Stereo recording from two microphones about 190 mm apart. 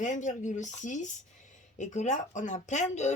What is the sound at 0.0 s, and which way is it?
Speech, 40° left (ahead or behind).